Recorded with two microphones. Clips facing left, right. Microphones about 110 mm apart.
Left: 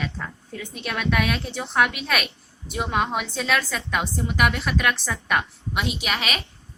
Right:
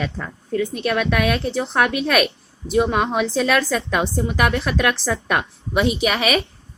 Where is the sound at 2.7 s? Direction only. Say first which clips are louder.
Right 6 dB; 70° right (ahead or behind); by 4.8 s 50° right (ahead or behind).